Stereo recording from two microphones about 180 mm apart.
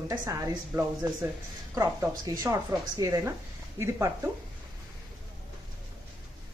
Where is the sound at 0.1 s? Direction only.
15° right (ahead or behind).